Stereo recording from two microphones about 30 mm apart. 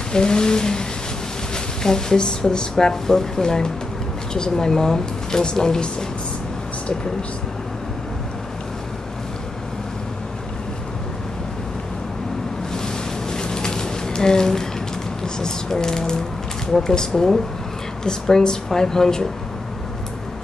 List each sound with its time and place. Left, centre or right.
0.1 s speech: left
12.7 s a sound: left
15.7 s speech: centre